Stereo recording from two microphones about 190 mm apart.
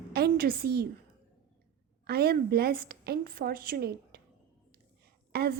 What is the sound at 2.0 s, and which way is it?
A woman's voice, 55° right (ahead or behind).